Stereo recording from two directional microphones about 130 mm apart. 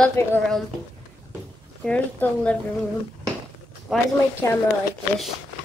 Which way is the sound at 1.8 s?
10° left (ahead or behind).